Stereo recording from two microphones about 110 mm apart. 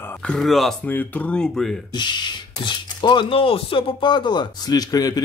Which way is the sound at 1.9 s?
40° left (ahead or behind).